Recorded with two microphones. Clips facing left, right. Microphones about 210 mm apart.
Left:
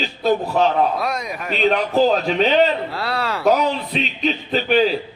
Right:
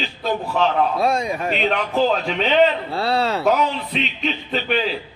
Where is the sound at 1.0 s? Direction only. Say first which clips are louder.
Right 4 dB; 30° right (ahead or behind).